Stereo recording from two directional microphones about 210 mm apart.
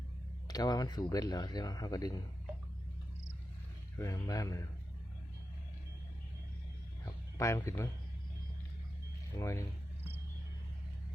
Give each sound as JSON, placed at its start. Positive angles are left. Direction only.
{"t": 0.4, "sound": "speech", "side_deg": 20}
{"t": 3.9, "sound": "speech", "side_deg": 15}
{"t": 7.3, "sound": "speech", "side_deg": 15}
{"t": 9.4, "sound": "speech", "side_deg": 15}